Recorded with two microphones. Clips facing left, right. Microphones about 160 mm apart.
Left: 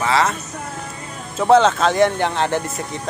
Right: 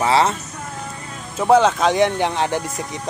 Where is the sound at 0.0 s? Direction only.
30° right (ahead or behind).